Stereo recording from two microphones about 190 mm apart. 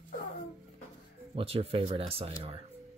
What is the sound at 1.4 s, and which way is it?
Speech, 30° right (ahead or behind).